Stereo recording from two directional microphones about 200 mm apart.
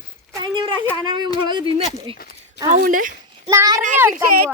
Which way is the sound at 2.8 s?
45° right (ahead or behind).